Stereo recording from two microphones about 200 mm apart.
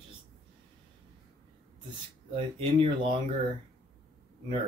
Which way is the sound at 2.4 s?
25° right (ahead or behind).